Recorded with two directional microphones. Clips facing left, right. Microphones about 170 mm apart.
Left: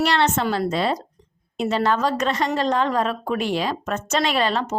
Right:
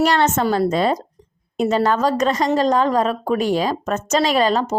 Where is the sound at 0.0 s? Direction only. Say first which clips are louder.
Right 3 dB; 45° right (ahead or behind).